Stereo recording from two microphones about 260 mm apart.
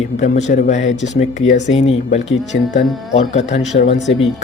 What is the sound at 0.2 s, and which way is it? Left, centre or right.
Speech, left.